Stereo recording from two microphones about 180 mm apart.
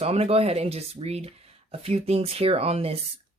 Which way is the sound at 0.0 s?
35° right (ahead or behind).